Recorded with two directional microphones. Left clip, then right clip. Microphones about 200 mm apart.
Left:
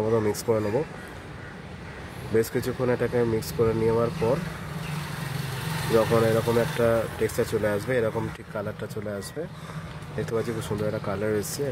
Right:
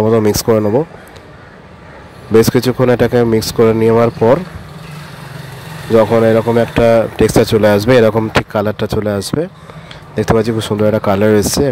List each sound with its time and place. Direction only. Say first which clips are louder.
0.0 s speech: right 13 dB; 35° right (ahead or behind)
2.3 s speech: right 15 dB; 40° right (ahead or behind)
5.9 s speech: right 12 dB; 35° right (ahead or behind)